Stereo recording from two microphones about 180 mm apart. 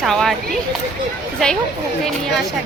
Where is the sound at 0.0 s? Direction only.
Centre (ahead or behind).